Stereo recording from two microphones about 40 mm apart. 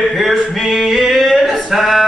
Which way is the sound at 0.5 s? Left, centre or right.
Centre.